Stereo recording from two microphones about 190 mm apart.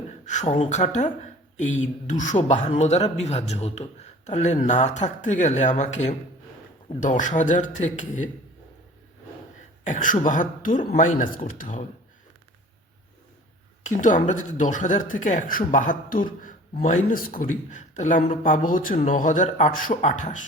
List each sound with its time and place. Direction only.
0.3 s speech: 40° left (ahead or behind)
9.8 s speech: 40° left (ahead or behind)
13.8 s speech: 40° left (ahead or behind)